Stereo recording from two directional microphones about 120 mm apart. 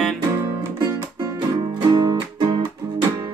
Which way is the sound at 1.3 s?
40° right (ahead or behind).